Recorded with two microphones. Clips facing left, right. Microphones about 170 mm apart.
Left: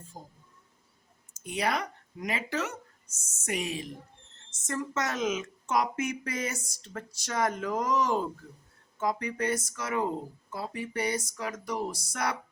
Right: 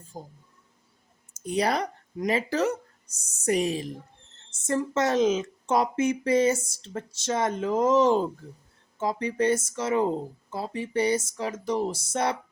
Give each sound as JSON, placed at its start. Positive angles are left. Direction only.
{"t": 1.3, "sound": "a woman's voice", "side_deg": -35}